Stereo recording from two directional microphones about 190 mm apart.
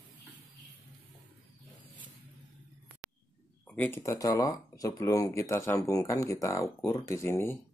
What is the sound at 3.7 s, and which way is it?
Speech, 10° left (ahead or behind).